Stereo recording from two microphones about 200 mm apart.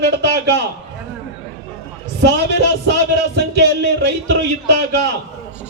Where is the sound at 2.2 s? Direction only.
60° right (ahead or behind).